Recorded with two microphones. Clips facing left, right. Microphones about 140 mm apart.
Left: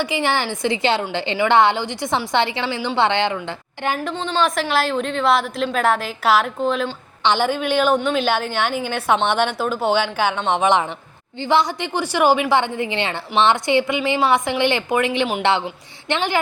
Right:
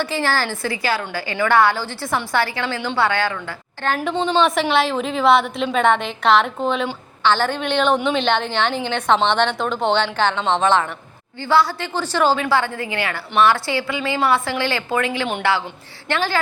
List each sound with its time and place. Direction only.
0.0 s a woman's voice: 15° left (ahead or behind)
4.0 s a woman's voice: 5° right (ahead or behind)
7.3 s a woman's voice: 15° left (ahead or behind)